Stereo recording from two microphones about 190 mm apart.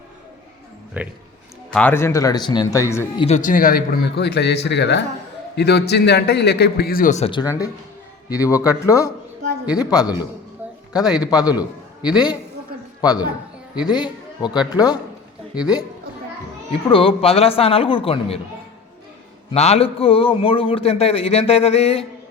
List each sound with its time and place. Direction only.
0.9 s a man's voice: 5° right (ahead or behind)
1.7 s speech: 10° left (ahead or behind)
3.2 s speech: 35° left (ahead or behind)
7.3 s speech: 25° left (ahead or behind)
10.6 s a sound: 10° right (ahead or behind)
10.9 s speech: 20° left (ahead or behind)
13.0 s speech: 20° left (ahead or behind)
16.9 s speech: 30° left (ahead or behind)
19.5 s a man's voice: 35° left (ahead or behind)